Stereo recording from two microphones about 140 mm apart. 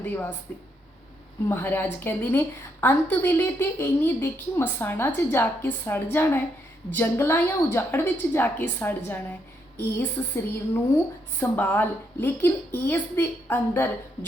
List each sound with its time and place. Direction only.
0.0 s speech: 15° left (ahead or behind)
1.5 s a woman's voice: 15° left (ahead or behind)